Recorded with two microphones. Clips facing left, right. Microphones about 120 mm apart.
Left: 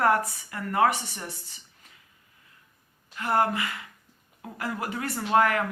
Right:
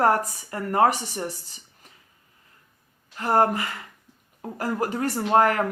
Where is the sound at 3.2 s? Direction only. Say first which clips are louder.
Right 4 dB; 40° right (ahead or behind).